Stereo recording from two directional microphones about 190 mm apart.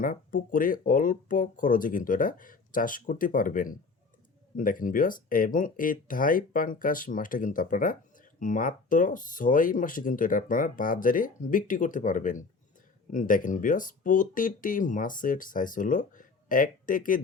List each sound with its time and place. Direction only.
0.0 s speech: 45° left (ahead or behind)